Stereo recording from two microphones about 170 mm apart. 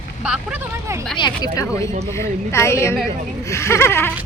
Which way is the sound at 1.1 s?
25° left (ahead or behind).